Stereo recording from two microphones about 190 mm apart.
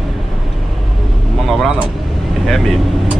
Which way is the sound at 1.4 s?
Centre (ahead or behind).